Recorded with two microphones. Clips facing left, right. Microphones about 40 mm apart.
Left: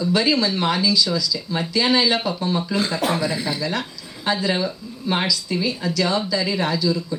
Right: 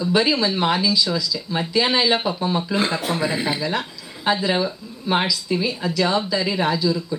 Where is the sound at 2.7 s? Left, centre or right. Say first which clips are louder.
Even; right.